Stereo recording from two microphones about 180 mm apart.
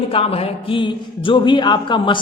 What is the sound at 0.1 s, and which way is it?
A man's voice, 30° left (ahead or behind).